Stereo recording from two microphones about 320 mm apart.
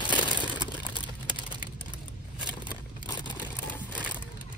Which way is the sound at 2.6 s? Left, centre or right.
Centre.